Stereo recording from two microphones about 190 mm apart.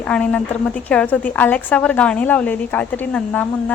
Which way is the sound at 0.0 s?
5° left (ahead or behind).